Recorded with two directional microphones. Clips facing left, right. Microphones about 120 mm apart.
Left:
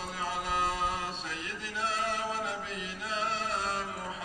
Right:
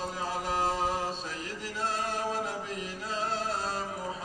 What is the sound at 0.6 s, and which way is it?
Chant, 40° right (ahead or behind).